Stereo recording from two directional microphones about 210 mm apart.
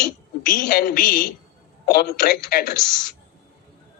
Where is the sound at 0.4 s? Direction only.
45° left (ahead or behind).